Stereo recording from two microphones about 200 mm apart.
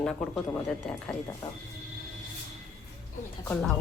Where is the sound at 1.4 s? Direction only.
20° left (ahead or behind).